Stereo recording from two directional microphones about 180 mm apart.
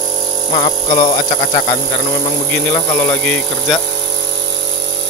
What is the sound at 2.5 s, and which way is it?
Speech, 10° left (ahead or behind).